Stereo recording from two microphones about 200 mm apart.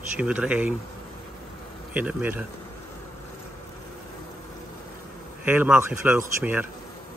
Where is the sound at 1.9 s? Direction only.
5° right (ahead or behind).